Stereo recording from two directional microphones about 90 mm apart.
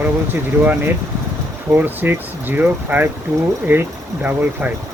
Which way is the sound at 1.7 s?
20° right (ahead or behind).